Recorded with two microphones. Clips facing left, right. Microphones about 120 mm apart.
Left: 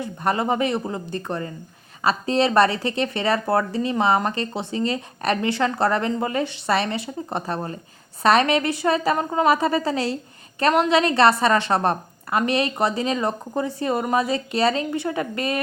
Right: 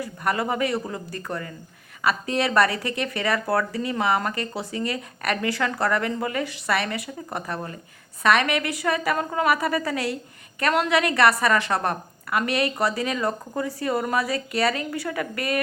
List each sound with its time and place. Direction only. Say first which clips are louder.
0.0 s speech: left 3 dB; 25° left (ahead or behind)